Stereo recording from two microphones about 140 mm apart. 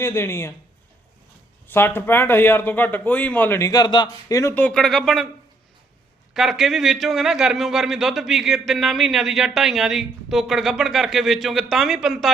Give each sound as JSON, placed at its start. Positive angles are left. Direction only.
{"t": 0.0, "sound": "a man's voice", "side_deg": 20}
{"t": 1.6, "sound": "a man's voice", "side_deg": 15}
{"t": 3.7, "sound": "speech", "side_deg": 30}
{"t": 4.5, "sound": "speech", "side_deg": 5}
{"t": 6.3, "sound": "speech", "side_deg": 0}